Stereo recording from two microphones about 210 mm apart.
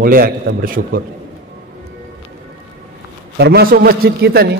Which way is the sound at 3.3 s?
50° right (ahead or behind).